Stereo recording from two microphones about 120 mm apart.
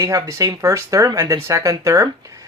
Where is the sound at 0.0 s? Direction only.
30° right (ahead or behind).